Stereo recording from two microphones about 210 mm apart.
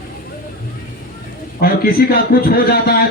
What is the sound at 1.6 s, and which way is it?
A man's voice, 45° left (ahead or behind).